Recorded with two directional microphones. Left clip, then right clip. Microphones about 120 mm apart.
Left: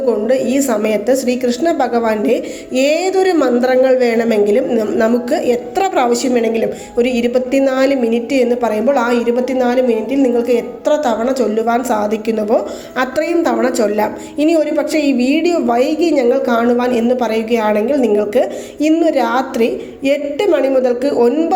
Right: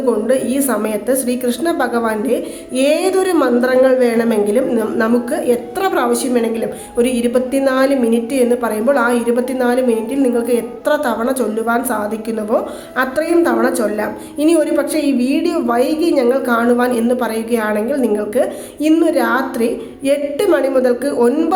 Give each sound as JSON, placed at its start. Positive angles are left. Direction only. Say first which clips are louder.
{"t": 0.0, "sound": "a woman's voice", "louder": "left 1 dB", "side_deg": 10}
{"t": 14.3, "sound": "a woman's voice", "louder": "even", "side_deg": 5}